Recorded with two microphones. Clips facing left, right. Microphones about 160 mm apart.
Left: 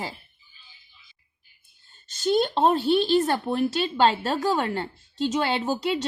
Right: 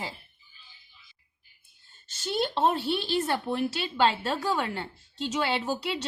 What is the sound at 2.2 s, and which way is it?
A woman's voice, 40° left (ahead or behind).